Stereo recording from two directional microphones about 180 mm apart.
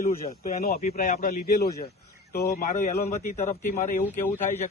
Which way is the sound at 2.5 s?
45° left (ahead or behind).